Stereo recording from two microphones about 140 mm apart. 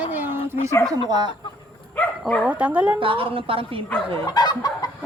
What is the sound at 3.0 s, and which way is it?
Speech, 40° right (ahead or behind).